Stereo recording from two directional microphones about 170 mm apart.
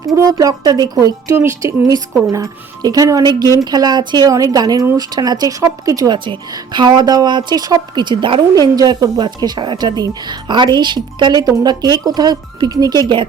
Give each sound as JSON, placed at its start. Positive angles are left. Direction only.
{"t": 0.0, "sound": "a woman's voice", "side_deg": -20}